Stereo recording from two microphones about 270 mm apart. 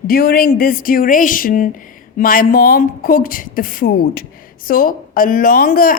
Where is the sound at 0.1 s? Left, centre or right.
Left.